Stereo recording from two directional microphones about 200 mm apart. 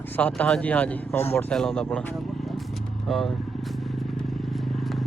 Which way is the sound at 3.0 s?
Centre (ahead or behind).